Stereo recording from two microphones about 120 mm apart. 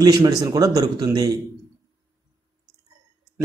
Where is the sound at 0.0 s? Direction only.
30° right (ahead or behind).